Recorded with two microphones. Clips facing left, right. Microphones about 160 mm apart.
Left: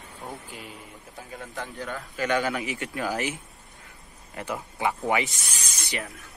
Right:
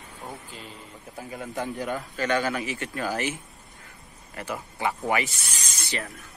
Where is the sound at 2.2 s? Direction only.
15° left (ahead or behind).